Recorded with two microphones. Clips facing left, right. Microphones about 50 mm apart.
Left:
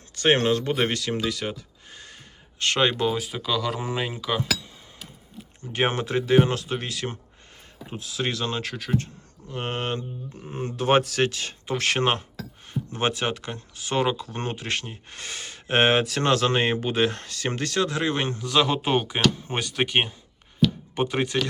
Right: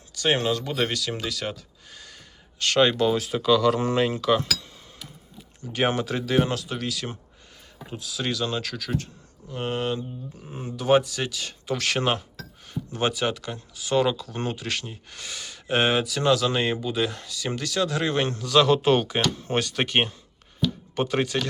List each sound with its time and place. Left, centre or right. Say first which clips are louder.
0.1 s speech: left 3 dB; left
1.9 s a sound: left 1 dB; left
2.6 s speech: right 2 dB; left
3.1 s speech: right 5 dB; centre
5.5 s speech: even; left
9.5 s speech: right 1 dB; left
17.7 s speech: right 1 dB; left; by 21.2 s centre